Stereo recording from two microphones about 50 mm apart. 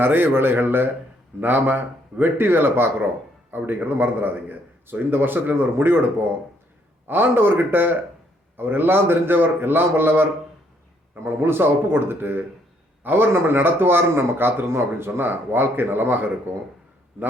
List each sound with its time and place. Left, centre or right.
0.0 s a man's voice: right